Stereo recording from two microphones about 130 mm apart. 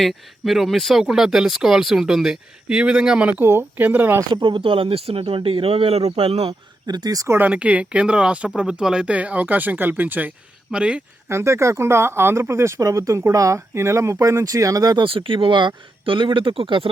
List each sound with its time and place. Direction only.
0.0 s speech: centre (ahead or behind)
4.3 s speech: 40° right (ahead or behind)
6.8 s speech: 30° right (ahead or behind)
7.3 s speech: 10° right (ahead or behind)
11.3 s speech: 20° right (ahead or behind)
15.0 s speech: 45° right (ahead or behind)